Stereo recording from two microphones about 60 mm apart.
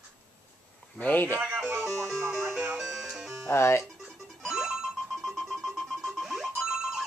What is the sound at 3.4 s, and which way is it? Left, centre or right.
Music, left.